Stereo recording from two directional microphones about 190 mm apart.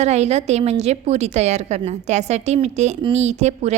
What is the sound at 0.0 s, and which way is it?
A woman's voice, 35° right (ahead or behind).